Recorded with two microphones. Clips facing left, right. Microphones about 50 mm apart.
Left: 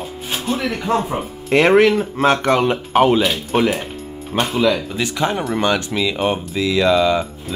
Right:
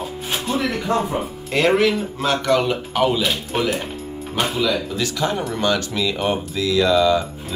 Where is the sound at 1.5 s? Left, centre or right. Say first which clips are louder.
Left 5 dB; left.